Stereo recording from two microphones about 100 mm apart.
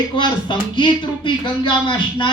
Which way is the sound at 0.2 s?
50° left (ahead or behind).